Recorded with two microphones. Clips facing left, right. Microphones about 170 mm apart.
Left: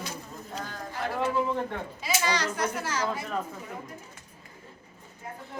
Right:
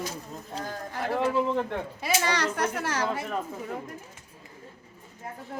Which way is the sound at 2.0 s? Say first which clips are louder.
Right 1 dB; 60° right (ahead or behind).